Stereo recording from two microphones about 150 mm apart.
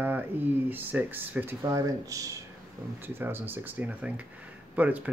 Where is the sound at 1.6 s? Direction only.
25° right (ahead or behind).